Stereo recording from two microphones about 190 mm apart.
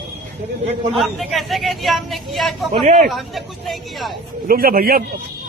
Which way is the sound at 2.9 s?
40° right (ahead or behind).